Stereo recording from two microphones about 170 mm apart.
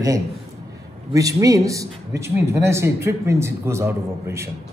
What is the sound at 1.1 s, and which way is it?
Speech, 20° right (ahead or behind).